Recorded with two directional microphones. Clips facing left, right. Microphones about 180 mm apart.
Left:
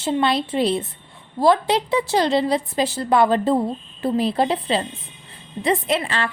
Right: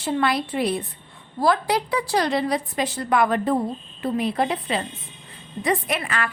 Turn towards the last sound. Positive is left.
turn(degrees=30)  # may be behind; listen again after turning